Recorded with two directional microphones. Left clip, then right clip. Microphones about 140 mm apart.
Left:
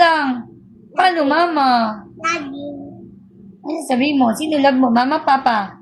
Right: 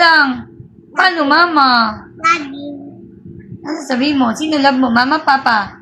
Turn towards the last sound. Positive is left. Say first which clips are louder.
# right 3 dB
turn(degrees=25)  # may be behind; listen again after turning